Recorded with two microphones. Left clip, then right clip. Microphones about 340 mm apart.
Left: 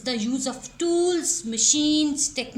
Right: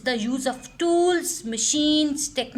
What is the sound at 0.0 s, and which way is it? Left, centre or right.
Speech, right.